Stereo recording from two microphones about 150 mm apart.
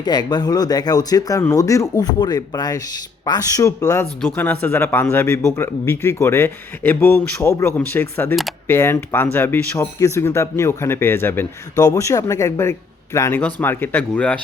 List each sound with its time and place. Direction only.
0.0 s speech: 30° left (ahead or behind); by 14.3 s 10° left (ahead or behind)